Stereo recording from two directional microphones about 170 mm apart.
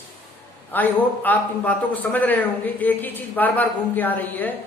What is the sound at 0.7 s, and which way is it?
A woman's voice, 10° left (ahead or behind).